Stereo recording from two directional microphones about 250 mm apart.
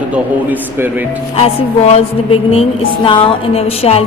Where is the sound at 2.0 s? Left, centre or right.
Left.